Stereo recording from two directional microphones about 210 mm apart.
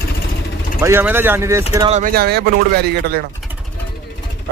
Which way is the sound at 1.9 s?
35° right (ahead or behind).